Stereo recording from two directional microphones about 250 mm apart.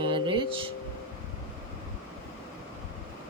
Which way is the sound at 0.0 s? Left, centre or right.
Centre.